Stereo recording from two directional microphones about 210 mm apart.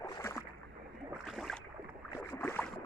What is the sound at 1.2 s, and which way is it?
Boat, centre (ahead or behind).